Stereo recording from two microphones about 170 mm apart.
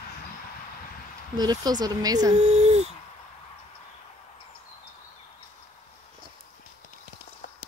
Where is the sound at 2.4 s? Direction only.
40° right (ahead or behind).